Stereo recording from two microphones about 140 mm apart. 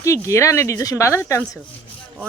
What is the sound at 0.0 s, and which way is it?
Speech, 20° left (ahead or behind).